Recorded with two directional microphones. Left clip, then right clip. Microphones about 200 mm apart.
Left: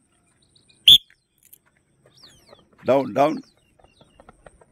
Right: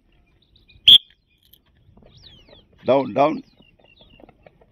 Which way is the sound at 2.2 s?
90° left.